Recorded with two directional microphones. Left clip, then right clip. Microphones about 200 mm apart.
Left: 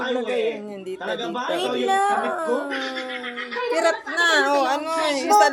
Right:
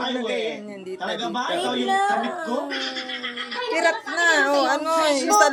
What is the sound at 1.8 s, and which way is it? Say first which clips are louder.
Speech: left 2 dB; 10° left (ahead or behind).